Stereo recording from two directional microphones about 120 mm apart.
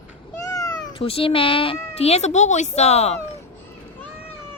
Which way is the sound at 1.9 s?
60° left (ahead or behind).